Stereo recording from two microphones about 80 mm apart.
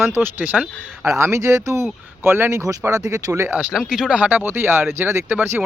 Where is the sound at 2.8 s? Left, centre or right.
Right.